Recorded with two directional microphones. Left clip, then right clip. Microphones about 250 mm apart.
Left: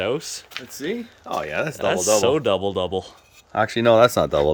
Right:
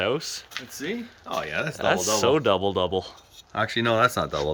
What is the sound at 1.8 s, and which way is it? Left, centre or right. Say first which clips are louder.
Speech: left 4 dB; centre.